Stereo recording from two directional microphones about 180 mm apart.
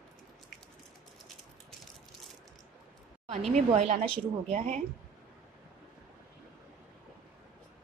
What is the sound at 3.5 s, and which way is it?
A woman's voice, 40° right (ahead or behind).